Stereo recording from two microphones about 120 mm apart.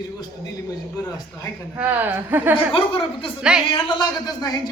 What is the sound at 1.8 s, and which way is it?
Speech, 15° right (ahead or behind).